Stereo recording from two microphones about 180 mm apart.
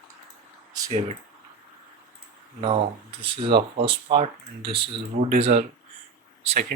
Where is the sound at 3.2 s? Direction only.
30° right (ahead or behind).